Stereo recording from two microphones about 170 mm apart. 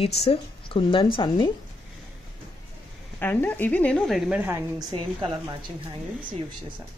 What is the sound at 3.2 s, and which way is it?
A woman's voice, 10° left (ahead or behind).